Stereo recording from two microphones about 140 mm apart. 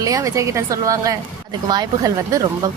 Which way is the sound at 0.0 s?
25° right (ahead or behind).